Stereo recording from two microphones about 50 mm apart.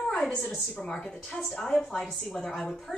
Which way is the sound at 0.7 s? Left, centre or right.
Centre.